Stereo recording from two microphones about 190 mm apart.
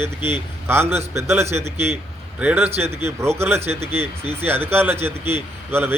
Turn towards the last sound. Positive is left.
turn(degrees=-10)  # may be behind; listen again after turning